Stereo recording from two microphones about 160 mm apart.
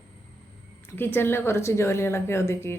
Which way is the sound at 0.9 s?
15° left (ahead or behind).